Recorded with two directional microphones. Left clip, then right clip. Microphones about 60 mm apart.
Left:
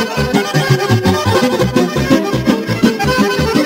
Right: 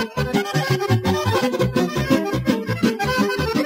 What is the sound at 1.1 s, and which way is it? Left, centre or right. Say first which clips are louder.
Music: left 7 dB; right.